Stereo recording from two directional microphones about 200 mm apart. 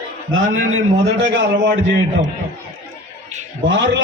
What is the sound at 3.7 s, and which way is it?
Speech, 65° right (ahead or behind).